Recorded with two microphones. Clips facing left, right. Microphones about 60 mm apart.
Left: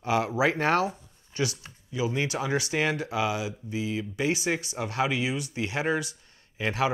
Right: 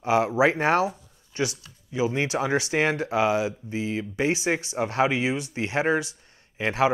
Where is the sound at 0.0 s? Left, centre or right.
Right.